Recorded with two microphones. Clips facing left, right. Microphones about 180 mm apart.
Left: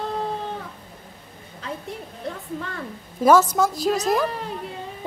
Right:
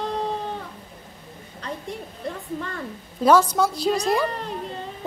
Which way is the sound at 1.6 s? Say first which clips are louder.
Even; centre (ahead or behind).